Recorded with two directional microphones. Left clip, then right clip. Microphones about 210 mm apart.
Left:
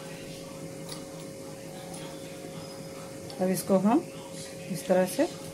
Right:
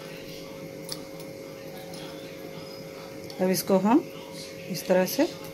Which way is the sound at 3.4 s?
15° right (ahead or behind).